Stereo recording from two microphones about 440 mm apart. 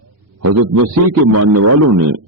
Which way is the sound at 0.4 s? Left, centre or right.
Right.